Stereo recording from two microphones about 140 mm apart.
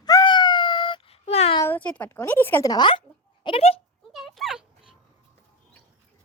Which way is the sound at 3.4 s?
45° left (ahead or behind).